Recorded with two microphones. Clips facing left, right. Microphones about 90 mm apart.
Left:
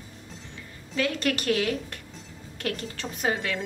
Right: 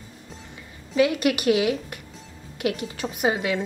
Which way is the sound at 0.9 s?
10° right (ahead or behind).